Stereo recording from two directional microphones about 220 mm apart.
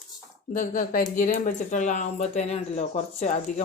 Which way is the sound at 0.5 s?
35° left (ahead or behind).